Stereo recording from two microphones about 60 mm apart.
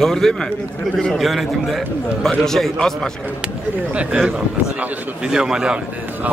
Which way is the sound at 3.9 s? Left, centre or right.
Right.